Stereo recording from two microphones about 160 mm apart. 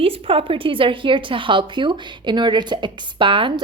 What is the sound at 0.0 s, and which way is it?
A woman's voice, 35° right (ahead or behind).